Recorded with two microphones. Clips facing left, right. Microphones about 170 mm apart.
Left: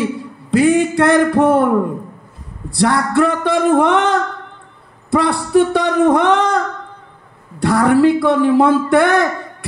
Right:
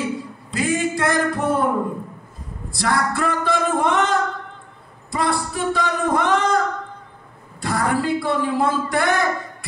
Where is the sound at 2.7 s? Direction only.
60° left (ahead or behind).